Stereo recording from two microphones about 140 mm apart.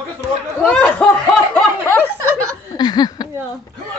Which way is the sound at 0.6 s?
5° left (ahead or behind).